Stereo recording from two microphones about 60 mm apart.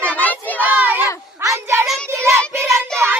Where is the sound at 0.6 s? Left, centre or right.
Right.